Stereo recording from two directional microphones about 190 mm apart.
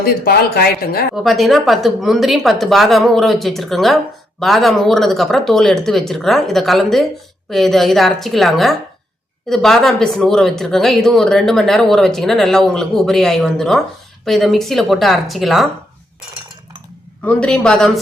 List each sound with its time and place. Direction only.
0.0 s speech: 55° left (ahead or behind)
1.1 s speech: centre (ahead or behind)
17.2 s speech: 5° left (ahead or behind)